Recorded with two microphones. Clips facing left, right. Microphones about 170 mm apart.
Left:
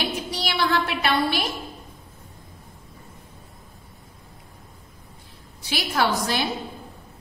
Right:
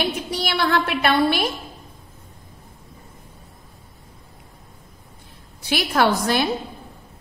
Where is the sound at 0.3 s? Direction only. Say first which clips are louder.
Right 2 dB; 55° right (ahead or behind).